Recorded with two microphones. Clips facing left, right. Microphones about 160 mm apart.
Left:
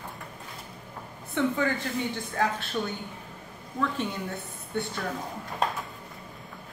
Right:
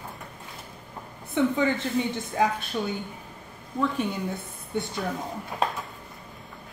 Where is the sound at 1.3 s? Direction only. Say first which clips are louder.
Right 3 dB; 20° right (ahead or behind).